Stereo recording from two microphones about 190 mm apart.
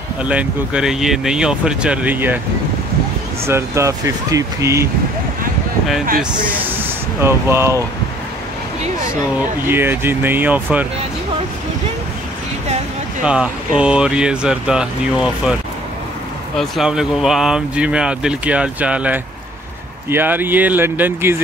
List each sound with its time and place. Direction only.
0.2 s speech: 5° right (ahead or behind)
3.4 s speech: 15° right (ahead or behind)
6.6 s speech: 10° right (ahead or behind)
9.7 s speech: 10° right (ahead or behind)
13.2 s speech: 5° right (ahead or behind)
16.5 s speech: centre (ahead or behind)